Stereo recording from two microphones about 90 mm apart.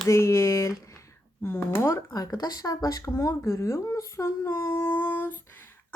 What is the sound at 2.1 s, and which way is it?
Speech, 45° left (ahead or behind).